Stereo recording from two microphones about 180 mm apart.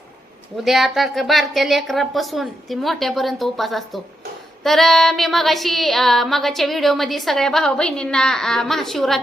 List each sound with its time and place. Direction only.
0.5 s female singing: centre (ahead or behind)